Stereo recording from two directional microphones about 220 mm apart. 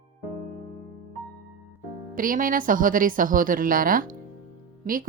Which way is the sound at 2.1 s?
40° right (ahead or behind).